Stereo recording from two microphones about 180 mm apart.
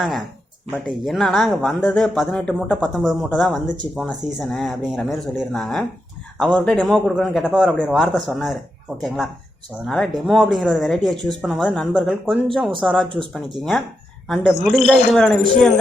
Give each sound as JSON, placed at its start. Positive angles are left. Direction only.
{"t": 0.0, "sound": "speech", "side_deg": 0}